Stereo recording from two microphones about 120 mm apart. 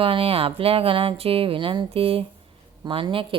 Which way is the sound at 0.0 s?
50° right (ahead or behind).